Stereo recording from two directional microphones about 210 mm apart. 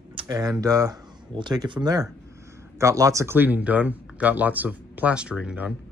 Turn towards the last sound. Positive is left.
turn(degrees=-5)  # may be behind; listen again after turning